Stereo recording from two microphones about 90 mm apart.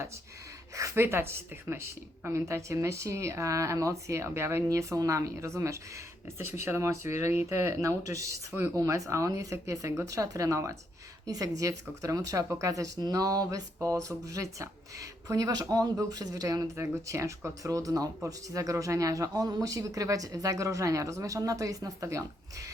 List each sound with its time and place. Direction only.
0.8 s speech: 35° right (ahead or behind)